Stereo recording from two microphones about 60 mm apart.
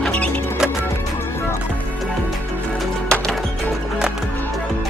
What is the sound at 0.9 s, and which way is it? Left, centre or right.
Music, left.